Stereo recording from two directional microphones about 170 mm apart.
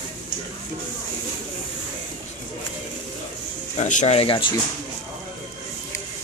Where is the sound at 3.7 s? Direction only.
45° left (ahead or behind).